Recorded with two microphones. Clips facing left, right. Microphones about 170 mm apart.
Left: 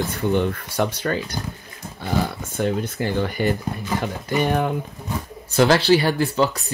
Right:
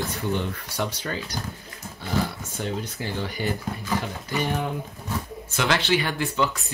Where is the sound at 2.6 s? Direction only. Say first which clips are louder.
Left 8 dB; 55° left (ahead or behind).